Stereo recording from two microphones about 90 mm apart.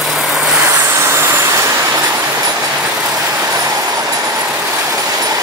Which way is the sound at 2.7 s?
15° right (ahead or behind).